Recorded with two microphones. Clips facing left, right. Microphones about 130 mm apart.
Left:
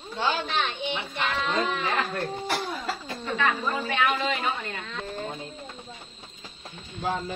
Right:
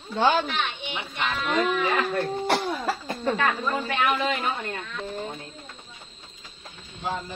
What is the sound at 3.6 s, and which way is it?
Speech, 10° left (ahead or behind).